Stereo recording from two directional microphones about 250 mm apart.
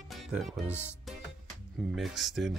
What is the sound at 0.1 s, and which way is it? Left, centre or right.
Speech, centre.